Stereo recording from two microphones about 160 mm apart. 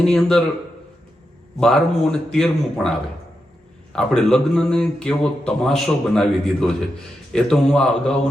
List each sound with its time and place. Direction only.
0.0 s speech: 5° left (ahead or behind)
1.5 s speech: 5° left (ahead or behind)